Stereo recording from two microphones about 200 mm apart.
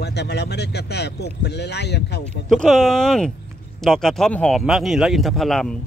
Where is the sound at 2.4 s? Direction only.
5° left (ahead or behind).